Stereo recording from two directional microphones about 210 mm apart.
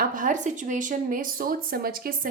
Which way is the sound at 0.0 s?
40° right (ahead or behind).